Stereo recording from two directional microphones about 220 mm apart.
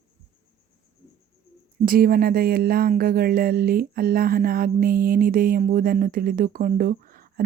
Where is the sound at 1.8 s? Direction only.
40° right (ahead or behind).